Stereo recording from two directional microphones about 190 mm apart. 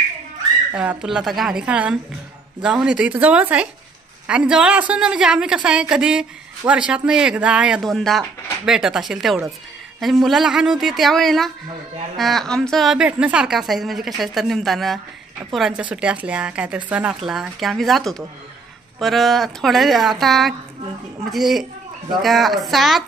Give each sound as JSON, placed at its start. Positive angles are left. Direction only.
{"t": 0.7, "sound": "speech", "side_deg": -5}